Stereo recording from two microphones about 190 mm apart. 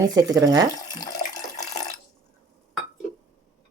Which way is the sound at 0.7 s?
20° left (ahead or behind).